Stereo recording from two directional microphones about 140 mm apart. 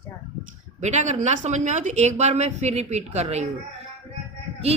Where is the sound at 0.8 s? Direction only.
55° right (ahead or behind).